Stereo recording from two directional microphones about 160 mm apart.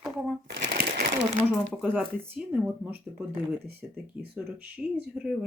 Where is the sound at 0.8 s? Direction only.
75° right (ahead or behind).